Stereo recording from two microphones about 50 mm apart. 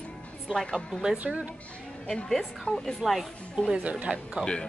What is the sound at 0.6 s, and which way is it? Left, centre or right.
Speech, centre.